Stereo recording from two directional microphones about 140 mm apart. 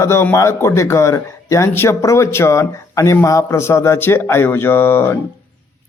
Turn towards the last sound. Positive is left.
turn(degrees=15)  # may be behind; listen again after turning